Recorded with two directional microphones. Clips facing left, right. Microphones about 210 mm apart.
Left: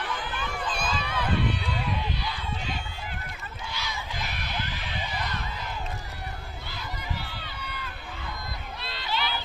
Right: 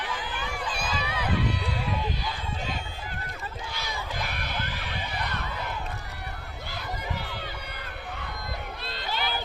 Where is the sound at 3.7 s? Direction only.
55° right (ahead or behind).